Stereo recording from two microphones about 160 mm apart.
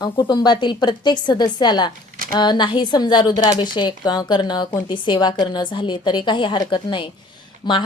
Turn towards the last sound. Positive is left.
turn(degrees=30)  # may be behind; listen again after turning